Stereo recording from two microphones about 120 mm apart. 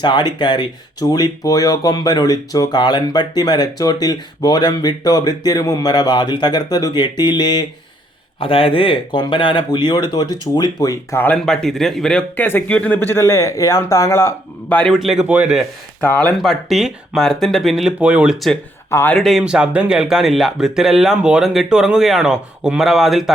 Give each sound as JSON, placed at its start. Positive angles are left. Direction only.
{"t": 0.0, "sound": "speech", "side_deg": 40}
{"t": 8.4, "sound": "speech", "side_deg": 50}
{"t": 11.3, "sound": "speech", "side_deg": 5}
{"t": 14.8, "sound": "speech", "side_deg": 0}
{"t": 16.0, "sound": "speech", "side_deg": 10}
{"t": 16.4, "sound": "speech", "side_deg": 0}
{"t": 18.9, "sound": "speech", "side_deg": 20}
{"t": 19.1, "sound": "speech", "side_deg": 0}